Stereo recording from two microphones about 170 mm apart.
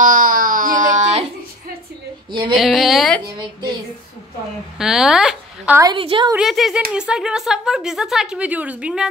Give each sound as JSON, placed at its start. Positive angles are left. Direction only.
{"t": 0.0, "sound": "a sound", "side_deg": -55}
{"t": 2.5, "sound": "speech", "side_deg": 0}
{"t": 3.3, "sound": "a woman's voice", "side_deg": -25}
{"t": 4.7, "sound": "speech", "side_deg": -5}
{"t": 5.8, "sound": "a woman's voice", "side_deg": -25}
{"t": 6.3, "sound": "speech", "side_deg": 0}